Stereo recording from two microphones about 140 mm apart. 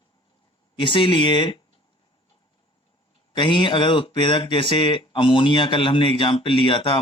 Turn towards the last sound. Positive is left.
turn(degrees=40)  # may be behind; listen again after turning